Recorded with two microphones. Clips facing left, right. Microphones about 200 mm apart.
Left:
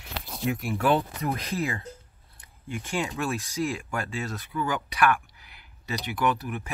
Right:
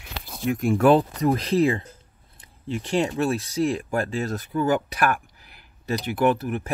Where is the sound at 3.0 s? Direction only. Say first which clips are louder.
Right 7 dB; 35° right (ahead or behind).